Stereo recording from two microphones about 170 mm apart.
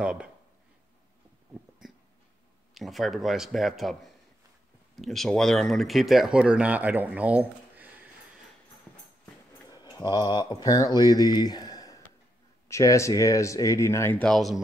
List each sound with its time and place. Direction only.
0.0 s speech: 5° right (ahead or behind)
2.7 s speech: centre (ahead or behind)
9.7 s speech: 25° left (ahead or behind); by 14.6 s centre (ahead or behind)